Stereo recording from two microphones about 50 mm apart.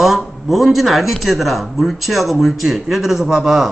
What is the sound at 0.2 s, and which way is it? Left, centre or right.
Speech, centre.